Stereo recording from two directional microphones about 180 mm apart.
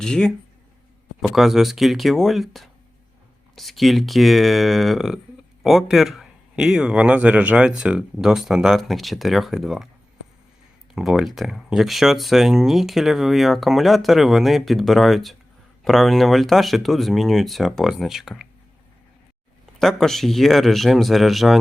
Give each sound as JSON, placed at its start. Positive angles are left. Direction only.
{"t": 0.0, "sound": "speech", "side_deg": 5}
{"t": 10.9, "sound": "speech", "side_deg": 0}
{"t": 19.8, "sound": "speech", "side_deg": 0}